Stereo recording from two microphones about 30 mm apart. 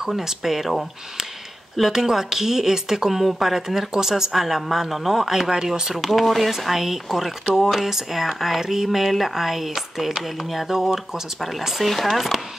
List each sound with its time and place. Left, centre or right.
0.0 s a woman's voice: centre
1.8 s a woman's voice: centre
5.9 s a woman's voice: centre
11.8 s speech: centre